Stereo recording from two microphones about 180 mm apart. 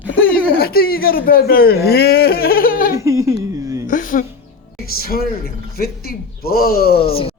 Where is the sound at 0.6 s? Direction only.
55° left (ahead or behind).